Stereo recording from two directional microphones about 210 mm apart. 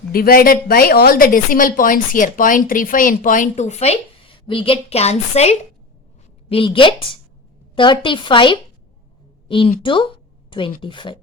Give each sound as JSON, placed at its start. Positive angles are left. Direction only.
{"t": 0.1, "sound": "a woman's voice", "side_deg": 45}